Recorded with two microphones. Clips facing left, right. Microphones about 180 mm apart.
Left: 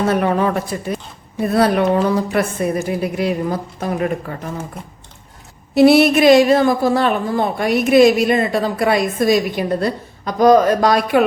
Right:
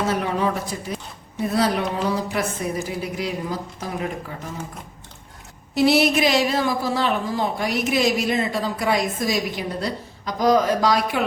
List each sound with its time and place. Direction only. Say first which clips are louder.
0.1 s speech: left 6 dB; 60° left (ahead or behind)
5.7 s speech: left 7 dB; 55° left (ahead or behind)